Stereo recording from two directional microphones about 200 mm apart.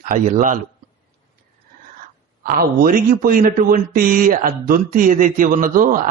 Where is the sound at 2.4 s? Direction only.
45° right (ahead or behind).